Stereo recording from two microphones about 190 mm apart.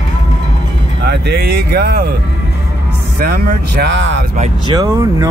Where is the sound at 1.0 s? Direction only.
60° right (ahead or behind).